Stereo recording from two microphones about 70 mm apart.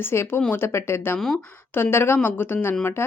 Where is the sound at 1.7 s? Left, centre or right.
Left.